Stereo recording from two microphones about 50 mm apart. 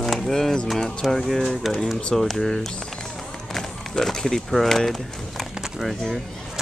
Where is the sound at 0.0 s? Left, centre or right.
Centre.